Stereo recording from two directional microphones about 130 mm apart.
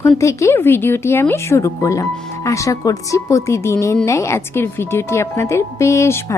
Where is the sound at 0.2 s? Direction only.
25° left (ahead or behind).